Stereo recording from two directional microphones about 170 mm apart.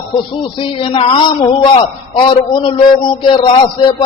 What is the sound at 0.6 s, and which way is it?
A man's voice, 30° left (ahead or behind).